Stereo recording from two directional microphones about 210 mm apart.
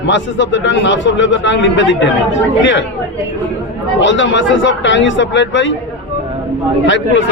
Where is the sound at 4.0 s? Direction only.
60° left (ahead or behind).